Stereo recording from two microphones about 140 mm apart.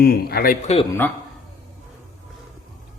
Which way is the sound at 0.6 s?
50° left (ahead or behind).